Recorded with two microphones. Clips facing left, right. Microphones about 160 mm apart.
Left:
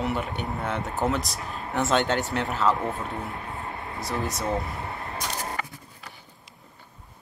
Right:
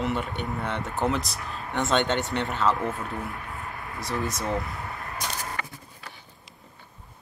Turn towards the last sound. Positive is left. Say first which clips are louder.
# left 2 dB
turn(degrees=25)  # may be behind; listen again after turning